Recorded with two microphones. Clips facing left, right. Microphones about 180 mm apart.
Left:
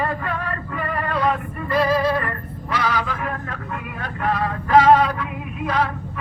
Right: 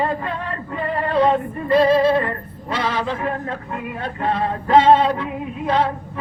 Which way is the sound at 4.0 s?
25° right (ahead or behind).